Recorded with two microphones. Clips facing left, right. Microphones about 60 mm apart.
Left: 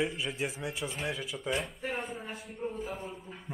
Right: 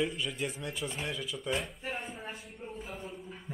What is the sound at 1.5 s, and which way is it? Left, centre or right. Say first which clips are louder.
Speech: left 2 dB; centre.